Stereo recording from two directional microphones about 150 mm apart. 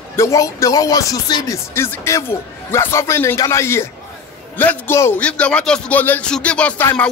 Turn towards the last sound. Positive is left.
turn(degrees=10)  # may be behind; listen again after turning